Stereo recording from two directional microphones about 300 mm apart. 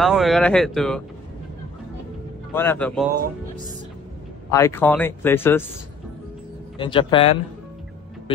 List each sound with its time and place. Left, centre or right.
0.0 s speech: centre
2.5 s speech: centre
4.5 s speech: centre
6.8 s speech: centre